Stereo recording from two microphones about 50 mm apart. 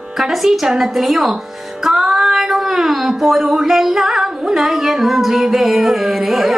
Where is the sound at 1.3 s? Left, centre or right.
Centre.